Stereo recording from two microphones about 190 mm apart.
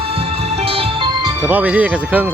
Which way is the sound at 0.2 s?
30° right (ahead or behind).